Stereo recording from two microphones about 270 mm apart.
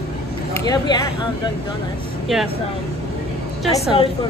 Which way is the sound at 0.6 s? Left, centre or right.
Centre.